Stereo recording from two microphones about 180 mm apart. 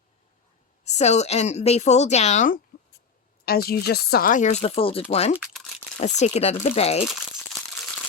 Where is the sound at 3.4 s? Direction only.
60° left (ahead or behind); by 7.0 s 35° left (ahead or behind).